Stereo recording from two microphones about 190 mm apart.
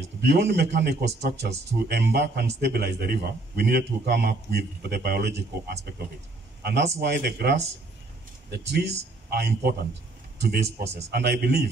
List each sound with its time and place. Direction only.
0.3 s a man's voice: 60° right (ahead or behind)
11.1 s a man's voice: 60° right (ahead or behind)